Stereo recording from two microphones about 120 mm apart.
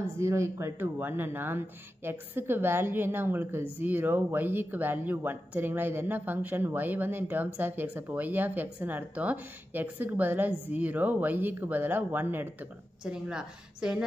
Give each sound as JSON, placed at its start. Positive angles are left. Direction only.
{"t": 0.0, "sound": "speech", "side_deg": -25}